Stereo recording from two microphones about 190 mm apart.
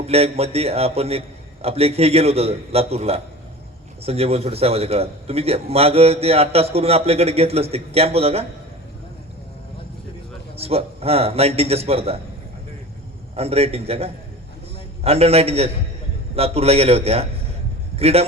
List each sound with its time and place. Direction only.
0.1 s a man's voice: 30° right (ahead or behind)
10.6 s a man's voice: 30° right (ahead or behind)
13.3 s a man's voice: 30° right (ahead or behind)